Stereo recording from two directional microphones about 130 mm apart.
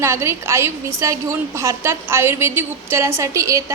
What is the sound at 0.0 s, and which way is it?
A woman's voice, 20° right (ahead or behind).